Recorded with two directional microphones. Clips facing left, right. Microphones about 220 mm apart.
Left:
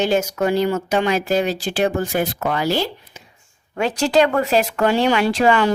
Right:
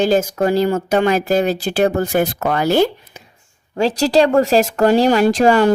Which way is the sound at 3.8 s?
35° right (ahead or behind).